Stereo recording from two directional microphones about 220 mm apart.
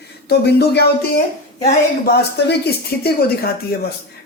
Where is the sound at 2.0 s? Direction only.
50° left (ahead or behind).